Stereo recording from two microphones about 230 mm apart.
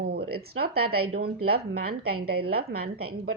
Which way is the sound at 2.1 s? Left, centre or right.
Right.